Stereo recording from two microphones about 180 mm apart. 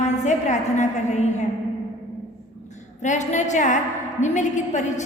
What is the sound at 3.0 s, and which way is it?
A woman's voice, 40° left (ahead or behind).